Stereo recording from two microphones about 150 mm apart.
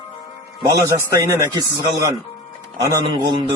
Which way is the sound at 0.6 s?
25° right (ahead or behind).